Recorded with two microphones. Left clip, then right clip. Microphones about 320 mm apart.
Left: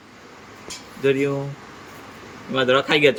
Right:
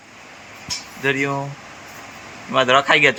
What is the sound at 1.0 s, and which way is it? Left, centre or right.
Speech, centre.